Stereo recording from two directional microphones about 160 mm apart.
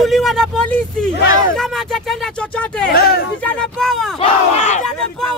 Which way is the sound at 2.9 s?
70° left (ahead or behind).